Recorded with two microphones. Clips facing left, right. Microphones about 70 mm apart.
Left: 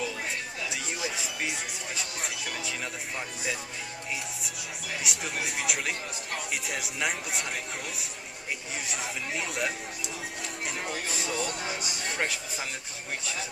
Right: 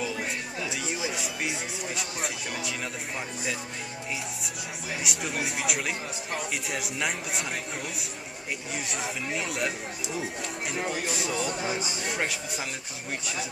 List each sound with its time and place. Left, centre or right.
1.1 s music: centre
2.0 s speech: centre
5.0 s speech: centre
8.8 s speech: centre
11.5 s speech: centre
12.1 s speech: centre